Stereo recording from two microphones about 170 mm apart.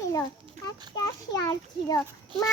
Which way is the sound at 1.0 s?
20° left (ahead or behind).